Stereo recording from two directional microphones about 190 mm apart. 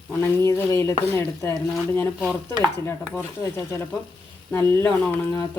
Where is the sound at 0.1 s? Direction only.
15° left (ahead or behind).